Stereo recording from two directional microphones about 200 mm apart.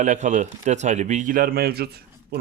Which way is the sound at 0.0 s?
35° right (ahead or behind).